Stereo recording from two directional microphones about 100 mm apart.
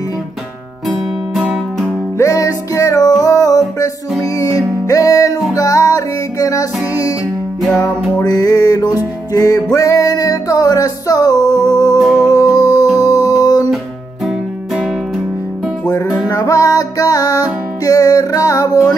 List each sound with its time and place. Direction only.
2.1 s music: 30° left (ahead or behind)
14.2 s music: 5° right (ahead or behind)
15.8 s music: 35° left (ahead or behind)